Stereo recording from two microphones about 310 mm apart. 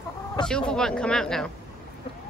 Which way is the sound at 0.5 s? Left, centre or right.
Centre.